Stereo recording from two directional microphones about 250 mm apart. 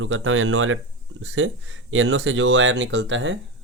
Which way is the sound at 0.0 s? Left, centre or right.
Right.